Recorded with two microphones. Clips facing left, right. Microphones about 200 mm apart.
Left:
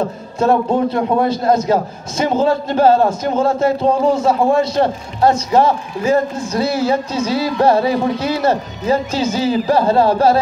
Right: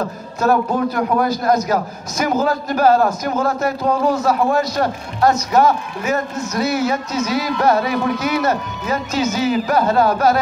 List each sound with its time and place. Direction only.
0.0 s a man's voice: 25° left (ahead or behind)